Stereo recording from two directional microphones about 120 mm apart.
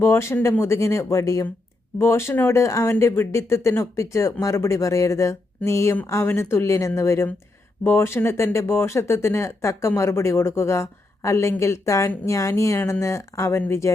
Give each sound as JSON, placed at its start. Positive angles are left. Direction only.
{"t": 0.0, "sound": "speech", "side_deg": 20}